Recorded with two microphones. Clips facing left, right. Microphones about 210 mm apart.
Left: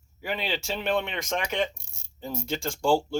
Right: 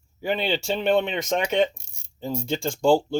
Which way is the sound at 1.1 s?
30° right (ahead or behind).